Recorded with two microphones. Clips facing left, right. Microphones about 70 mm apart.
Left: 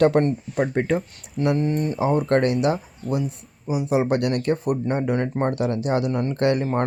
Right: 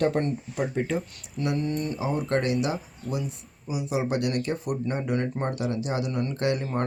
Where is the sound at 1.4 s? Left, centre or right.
Left.